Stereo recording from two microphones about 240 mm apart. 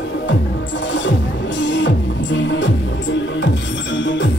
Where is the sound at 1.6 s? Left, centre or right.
Left.